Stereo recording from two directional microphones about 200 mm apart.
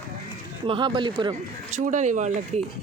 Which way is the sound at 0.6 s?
25° right (ahead or behind).